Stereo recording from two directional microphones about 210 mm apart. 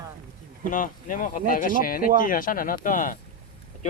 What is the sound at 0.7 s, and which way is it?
Speech, 40° left (ahead or behind).